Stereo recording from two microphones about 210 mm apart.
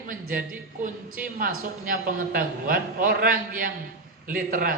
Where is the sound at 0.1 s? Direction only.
40° right (ahead or behind).